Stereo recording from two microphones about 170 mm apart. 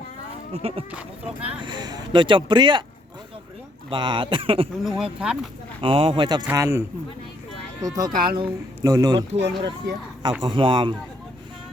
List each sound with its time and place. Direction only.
0.5 s speech: 35° right (ahead or behind)
0.9 s speech: 5° right (ahead or behind)
1.5 s speech: 25° right (ahead or behind)
3.8 s speech: 30° right (ahead or behind)
4.8 s speech: centre (ahead or behind)
5.8 s speech: 30° right (ahead or behind)